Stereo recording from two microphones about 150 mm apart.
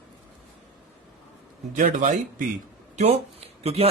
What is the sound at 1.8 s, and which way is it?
Speech, 60° right (ahead or behind).